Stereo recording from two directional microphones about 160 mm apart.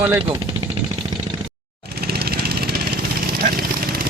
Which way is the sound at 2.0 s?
70° right (ahead or behind).